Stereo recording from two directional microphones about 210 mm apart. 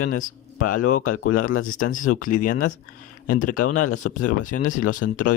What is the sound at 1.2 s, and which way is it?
Speech, 90° left.